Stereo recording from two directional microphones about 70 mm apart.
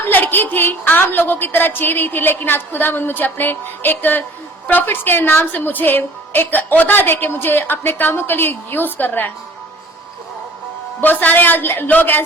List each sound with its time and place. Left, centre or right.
0.0 s a woman's voice: left
11.0 s a woman's voice: left